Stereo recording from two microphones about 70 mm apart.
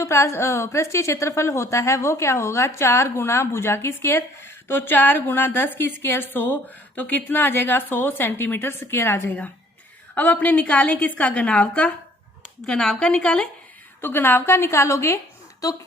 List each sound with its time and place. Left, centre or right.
0.0 s a woman's voice: left; by 13.5 s centre
14.0 s a woman's voice: left